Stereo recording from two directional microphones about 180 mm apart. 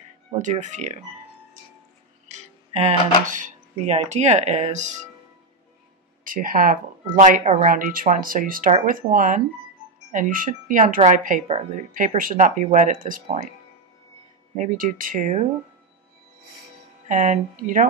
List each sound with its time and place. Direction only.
0.3 s speech: 40° right (ahead or behind)
2.2 s music: 40° right (ahead or behind)
3.3 s speech: 45° right (ahead or behind)
6.2 s speech: 50° right (ahead or behind)
14.5 s speech: 45° right (ahead or behind)
17.1 s speech: 45° right (ahead or behind)